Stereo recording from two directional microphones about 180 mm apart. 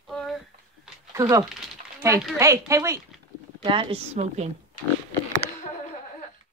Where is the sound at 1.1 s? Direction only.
15° right (ahead or behind).